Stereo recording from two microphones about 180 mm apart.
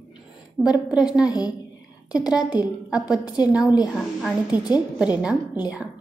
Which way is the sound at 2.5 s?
20° left (ahead or behind).